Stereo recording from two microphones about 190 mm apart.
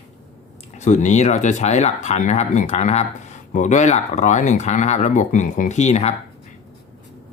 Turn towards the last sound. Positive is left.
turn(degrees=35)  # may be behind; listen again after turning